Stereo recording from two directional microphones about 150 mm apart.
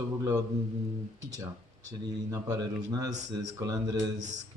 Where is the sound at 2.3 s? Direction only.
25° right (ahead or behind).